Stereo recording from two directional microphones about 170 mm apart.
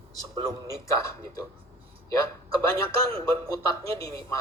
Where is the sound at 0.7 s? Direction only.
15° left (ahead or behind).